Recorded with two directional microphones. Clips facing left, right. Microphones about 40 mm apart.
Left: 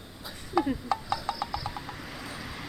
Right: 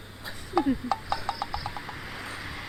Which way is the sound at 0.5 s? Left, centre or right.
Centre.